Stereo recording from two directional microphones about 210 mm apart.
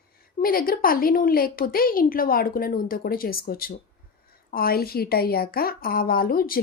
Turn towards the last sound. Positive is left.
turn(degrees=45)  # may be behind; listen again after turning